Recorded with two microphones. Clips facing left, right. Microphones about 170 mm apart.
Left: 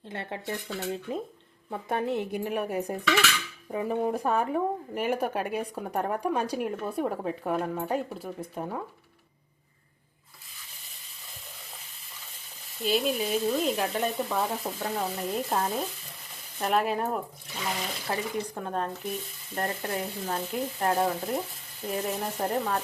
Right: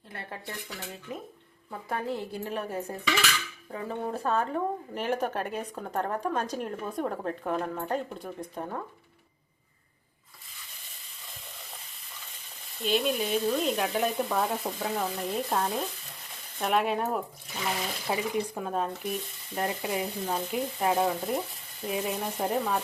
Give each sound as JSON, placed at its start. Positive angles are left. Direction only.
{"t": 0.1, "sound": "speech", "side_deg": 20}
{"t": 12.8, "sound": "speech", "side_deg": 5}